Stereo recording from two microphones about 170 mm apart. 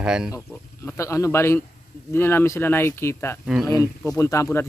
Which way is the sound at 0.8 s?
15° left (ahead or behind).